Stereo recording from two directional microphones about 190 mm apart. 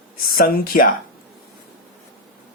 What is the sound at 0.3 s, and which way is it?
Speech, 50° left (ahead or behind).